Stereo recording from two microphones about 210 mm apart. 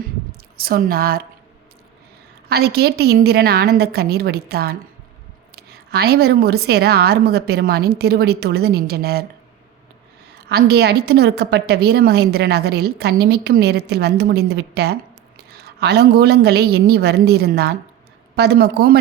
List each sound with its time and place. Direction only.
0.5 s a woman's voice: 45° right (ahead or behind)
2.5 s a woman's voice: 50° right (ahead or behind)
10.5 s a woman's voice: 50° right (ahead or behind)